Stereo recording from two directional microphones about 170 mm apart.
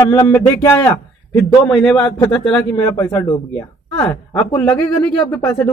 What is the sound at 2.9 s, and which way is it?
Speech, 15° left (ahead or behind).